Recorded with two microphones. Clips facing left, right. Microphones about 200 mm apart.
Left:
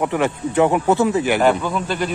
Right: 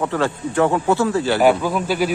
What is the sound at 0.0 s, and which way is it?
Speech, 20° left (ahead or behind).